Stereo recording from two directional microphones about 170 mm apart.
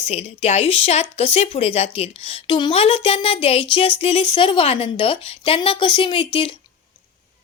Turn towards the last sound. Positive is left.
turn(degrees=30)  # may be behind; listen again after turning